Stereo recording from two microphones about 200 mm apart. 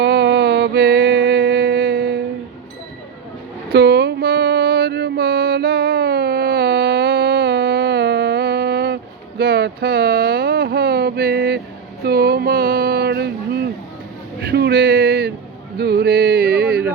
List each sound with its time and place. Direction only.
0.0 s mantra: 55° right (ahead or behind)
3.7 s mantra: 55° right (ahead or behind)
9.4 s a sound: 55° right (ahead or behind)